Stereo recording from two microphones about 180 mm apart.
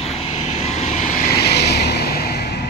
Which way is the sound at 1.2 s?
60° left (ahead or behind).